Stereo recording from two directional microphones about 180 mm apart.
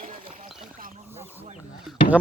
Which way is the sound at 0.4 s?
Centre (ahead or behind).